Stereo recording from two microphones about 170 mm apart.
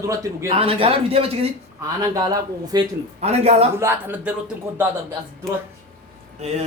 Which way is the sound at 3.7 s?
10° right (ahead or behind).